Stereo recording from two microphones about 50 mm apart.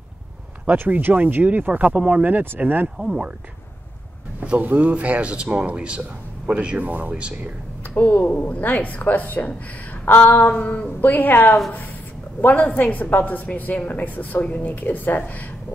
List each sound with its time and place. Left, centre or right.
0.7 s speech: right
4.4 s speech: right
7.2 s speech: right
7.8 s speech: left
10.0 s a sound: left
10.3 s speech: left